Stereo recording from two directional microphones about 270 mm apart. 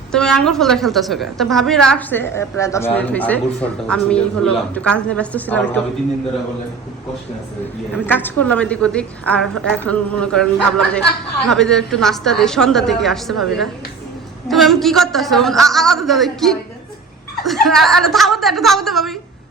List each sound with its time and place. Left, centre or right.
0.1 s a woman's voice: centre
8.0 s a woman's voice: centre